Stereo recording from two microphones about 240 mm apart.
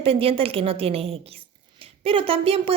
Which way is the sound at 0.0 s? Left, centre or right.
Right.